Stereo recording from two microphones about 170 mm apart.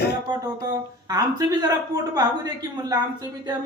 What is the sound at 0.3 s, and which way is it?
Speech, 20° right (ahead or behind).